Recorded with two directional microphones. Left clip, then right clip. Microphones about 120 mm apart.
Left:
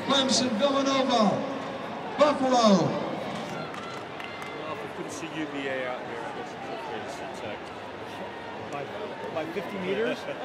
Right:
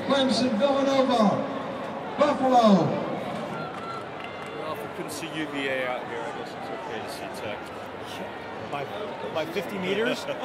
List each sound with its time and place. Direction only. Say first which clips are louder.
0.1 s a man's voice: right 1 dB; 40° left (ahead or behind)
5.6 s a man's voice: right 4 dB; 35° right (ahead or behind)
9.8 s speech: right 2 dB; 45° right (ahead or behind)